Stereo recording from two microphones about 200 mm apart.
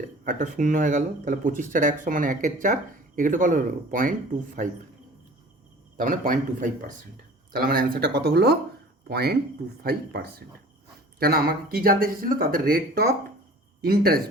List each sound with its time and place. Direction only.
0.3 s speech: 40° right (ahead or behind)
6.0 s speech: 40° right (ahead or behind)